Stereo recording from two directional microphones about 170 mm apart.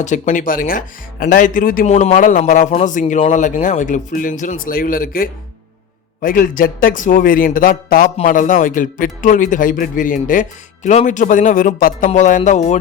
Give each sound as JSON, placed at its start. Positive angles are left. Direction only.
{"t": 0.0, "sound": "speech", "side_deg": 45}